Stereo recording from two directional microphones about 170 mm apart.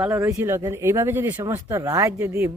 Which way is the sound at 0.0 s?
15° right (ahead or behind).